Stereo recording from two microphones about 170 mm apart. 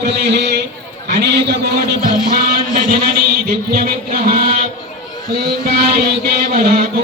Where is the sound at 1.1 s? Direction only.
75° right (ahead or behind).